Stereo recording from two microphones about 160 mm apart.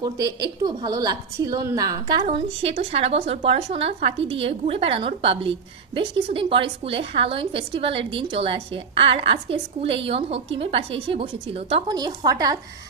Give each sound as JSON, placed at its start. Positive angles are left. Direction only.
{"t": 0.0, "sound": "a woman's voice", "side_deg": -25}
{"t": 2.2, "sound": "speech", "side_deg": -40}
{"t": 11.9, "sound": "a woman's voice", "side_deg": -25}